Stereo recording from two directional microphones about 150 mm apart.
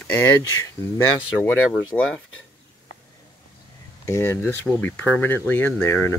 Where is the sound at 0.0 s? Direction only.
15° left (ahead or behind).